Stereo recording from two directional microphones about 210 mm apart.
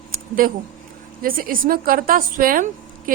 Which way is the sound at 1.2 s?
45° right (ahead or behind).